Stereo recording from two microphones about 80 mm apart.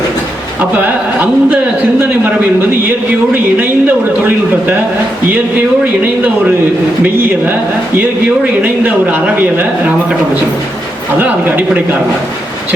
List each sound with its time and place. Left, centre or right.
0.8 s speech: centre
3.3 s speech: right
5.8 s speech: centre
8.6 s speech: centre
11.2 s speech: right